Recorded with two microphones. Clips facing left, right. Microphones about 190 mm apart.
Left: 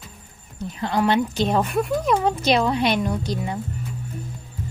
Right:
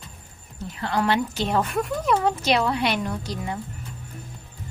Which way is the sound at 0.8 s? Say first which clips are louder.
Left 3 dB; 15° left (ahead or behind).